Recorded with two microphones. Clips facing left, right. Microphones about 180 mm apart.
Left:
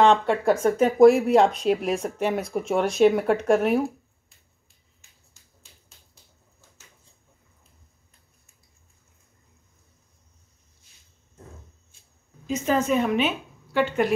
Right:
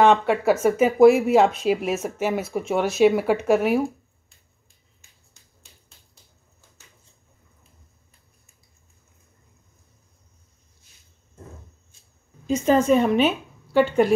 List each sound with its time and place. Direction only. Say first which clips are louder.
0.0 s speech: right 1 dB; 5° right (ahead or behind)
12.4 s a woman's voice: right 5 dB; 30° right (ahead or behind)